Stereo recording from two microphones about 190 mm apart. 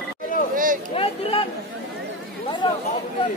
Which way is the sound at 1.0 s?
30° left (ahead or behind).